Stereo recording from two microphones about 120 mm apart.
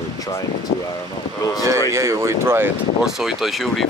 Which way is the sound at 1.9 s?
25° right (ahead or behind).